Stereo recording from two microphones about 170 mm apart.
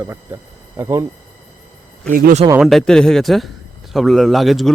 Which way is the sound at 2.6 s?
Centre (ahead or behind).